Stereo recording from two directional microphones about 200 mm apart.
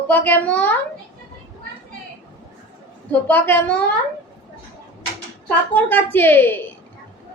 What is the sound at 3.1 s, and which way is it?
Speech, 10° left (ahead or behind).